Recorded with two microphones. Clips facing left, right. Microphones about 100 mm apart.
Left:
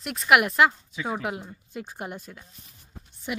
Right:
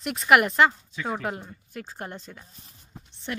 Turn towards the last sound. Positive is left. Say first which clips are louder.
# left 1 dB
turn(degrees=10)  # may be behind; listen again after turning